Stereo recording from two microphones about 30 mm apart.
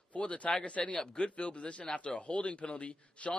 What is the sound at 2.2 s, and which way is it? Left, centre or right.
Speech, left.